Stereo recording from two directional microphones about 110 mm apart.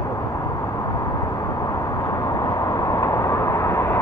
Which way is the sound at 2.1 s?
35° left (ahead or behind).